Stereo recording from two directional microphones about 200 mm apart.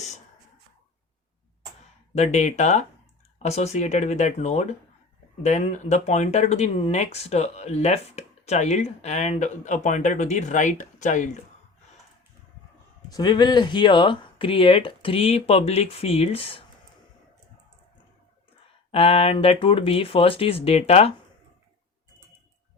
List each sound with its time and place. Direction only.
2.1 s speech: 35° left (ahead or behind)
13.1 s speech: 20° left (ahead or behind)
18.9 s speech: 30° left (ahead or behind)